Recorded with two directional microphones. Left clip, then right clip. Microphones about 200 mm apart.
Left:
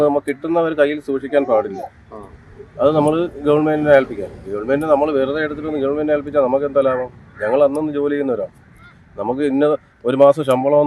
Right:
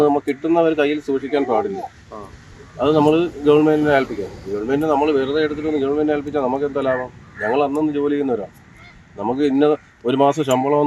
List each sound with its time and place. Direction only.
0.0 s speech: 15° left (ahead or behind)